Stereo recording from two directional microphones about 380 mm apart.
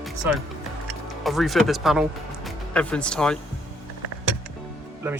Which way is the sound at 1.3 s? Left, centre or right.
Centre.